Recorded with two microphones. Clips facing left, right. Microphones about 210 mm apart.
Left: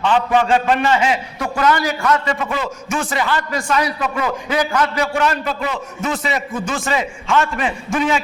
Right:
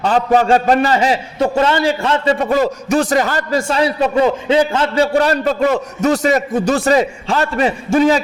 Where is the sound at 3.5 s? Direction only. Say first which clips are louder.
Right 4 dB; 30° right (ahead or behind).